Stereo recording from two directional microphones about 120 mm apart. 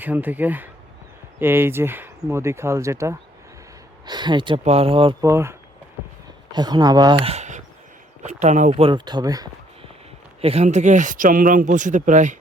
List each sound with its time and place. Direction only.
0.0 s speech: 15° right (ahead or behind)
4.0 s speech: 35° right (ahead or behind)
4.6 s speech: 55° right (ahead or behind)
5.2 s speech: 25° right (ahead or behind)
6.5 s speech: 35° right (ahead or behind)
7.3 s a sound: 80° right
8.2 s speech: 80° right
8.8 s speech: 40° right (ahead or behind)
10.4 s speech: 60° right (ahead or behind); by 12.4 s 90° right